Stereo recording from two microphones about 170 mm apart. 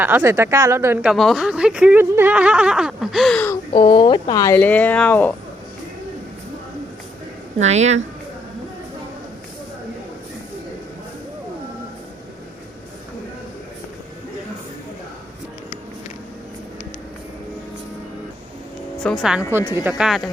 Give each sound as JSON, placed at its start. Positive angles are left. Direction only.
{"t": 0.0, "sound": "speech", "side_deg": -15}
{"t": 1.1, "sound": "speech", "side_deg": 0}
{"t": 3.7, "sound": "speech", "side_deg": 30}
{"t": 7.6, "sound": "speech", "side_deg": -40}
{"t": 19.0, "sound": "speech", "side_deg": 0}
{"t": 19.5, "sound": "speech", "side_deg": -15}
{"t": 20.0, "sound": "speech", "side_deg": 0}